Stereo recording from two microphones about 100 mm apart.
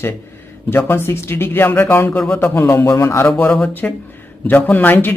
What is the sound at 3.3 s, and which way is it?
Speech, 15° left (ahead or behind).